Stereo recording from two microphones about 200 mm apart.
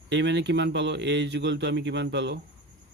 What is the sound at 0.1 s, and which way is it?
Speech, 60° right (ahead or behind).